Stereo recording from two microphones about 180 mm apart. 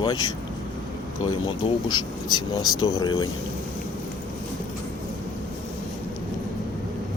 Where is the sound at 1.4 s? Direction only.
25° left (ahead or behind).